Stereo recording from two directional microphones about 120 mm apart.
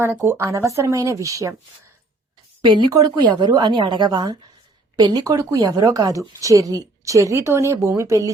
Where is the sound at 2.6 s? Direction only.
40° right (ahead or behind).